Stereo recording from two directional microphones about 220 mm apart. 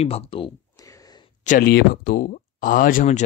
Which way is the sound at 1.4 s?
40° left (ahead or behind).